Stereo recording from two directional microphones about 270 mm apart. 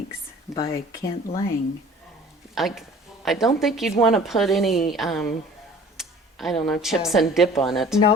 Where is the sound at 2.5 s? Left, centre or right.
Centre.